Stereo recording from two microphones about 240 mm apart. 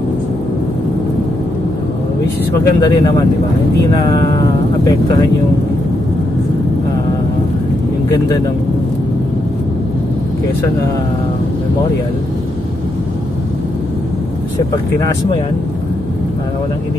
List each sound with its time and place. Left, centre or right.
2.6 s speech: centre